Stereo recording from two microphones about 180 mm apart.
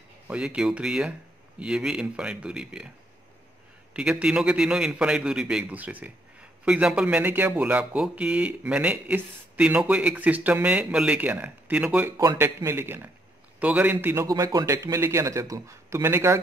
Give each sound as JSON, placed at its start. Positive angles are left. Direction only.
{"t": 0.3, "sound": "a man's voice", "side_deg": -5}
{"t": 3.9, "sound": "a man's voice", "side_deg": -5}
{"t": 12.2, "sound": "a man's voice", "side_deg": -20}